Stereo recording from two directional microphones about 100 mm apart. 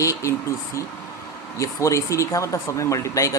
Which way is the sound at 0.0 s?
30° left (ahead or behind).